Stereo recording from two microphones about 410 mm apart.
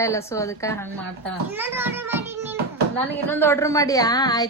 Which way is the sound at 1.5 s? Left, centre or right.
Centre.